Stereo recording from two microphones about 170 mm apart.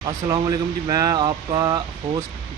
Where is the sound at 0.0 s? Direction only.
20° right (ahead or behind).